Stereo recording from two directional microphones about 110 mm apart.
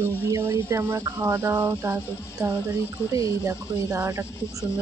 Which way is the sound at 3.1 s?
30° right (ahead or behind).